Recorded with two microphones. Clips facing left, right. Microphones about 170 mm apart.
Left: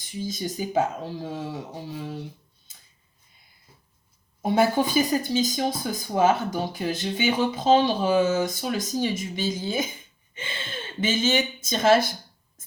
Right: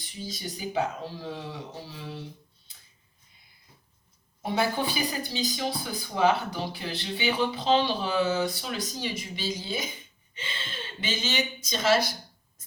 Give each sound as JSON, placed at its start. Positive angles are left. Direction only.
{"t": 0.3, "sound": "speech", "side_deg": 45}
{"t": 4.4, "sound": "speech", "side_deg": 45}